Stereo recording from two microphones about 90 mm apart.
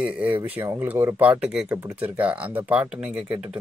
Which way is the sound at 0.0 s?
15° right (ahead or behind).